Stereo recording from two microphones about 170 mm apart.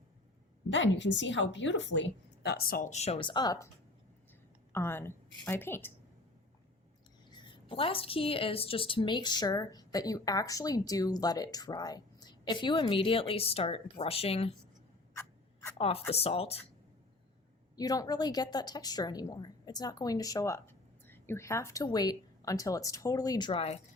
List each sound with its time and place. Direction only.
0.7 s a woman's voice: 90° left; by 3.7 s 20° left (ahead or behind)
4.7 s a woman's voice: 15° left (ahead or behind)
7.3 s a woman's voice: 30° left (ahead or behind)
16.1 s speech: 35° left (ahead or behind)
17.7 s a woman's voice: 20° left (ahead or behind); by 23.8 s 35° left (ahead or behind)